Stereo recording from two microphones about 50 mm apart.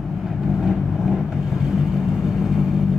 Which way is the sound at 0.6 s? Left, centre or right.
Centre.